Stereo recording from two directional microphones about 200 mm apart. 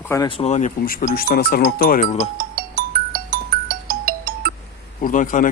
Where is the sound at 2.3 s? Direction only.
45° right (ahead or behind).